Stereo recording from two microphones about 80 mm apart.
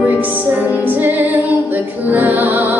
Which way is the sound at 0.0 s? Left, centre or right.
Right.